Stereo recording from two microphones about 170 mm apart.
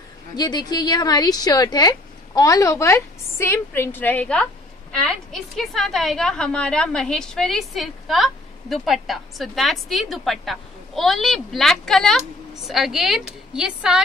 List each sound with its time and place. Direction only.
0.4 s a woman's voice: 25° left (ahead or behind); by 14.0 s 5° right (ahead or behind)